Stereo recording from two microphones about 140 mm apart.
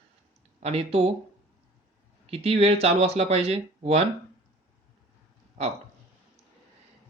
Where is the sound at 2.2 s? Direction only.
45° right (ahead or behind).